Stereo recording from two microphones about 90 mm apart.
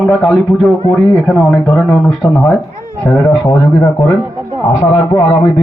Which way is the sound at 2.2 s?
20° left (ahead or behind).